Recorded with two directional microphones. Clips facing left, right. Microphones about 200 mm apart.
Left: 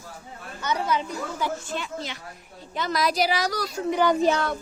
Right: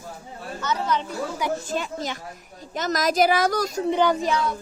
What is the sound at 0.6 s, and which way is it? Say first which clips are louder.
Speech: even; 15° left (ahead or behind).